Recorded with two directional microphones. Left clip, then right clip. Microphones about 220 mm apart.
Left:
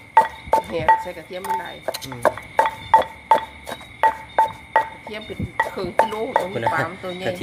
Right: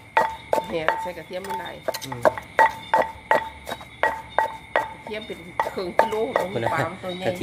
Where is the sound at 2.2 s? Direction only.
Centre (ahead or behind).